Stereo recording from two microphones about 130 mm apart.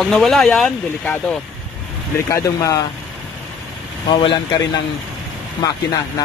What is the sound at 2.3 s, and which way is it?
Speech, 25° left (ahead or behind).